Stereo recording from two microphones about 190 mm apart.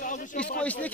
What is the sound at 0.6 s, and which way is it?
Speech, 10° left (ahead or behind).